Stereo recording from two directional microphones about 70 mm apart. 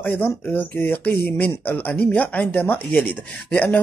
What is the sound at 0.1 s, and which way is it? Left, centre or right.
Speech, left.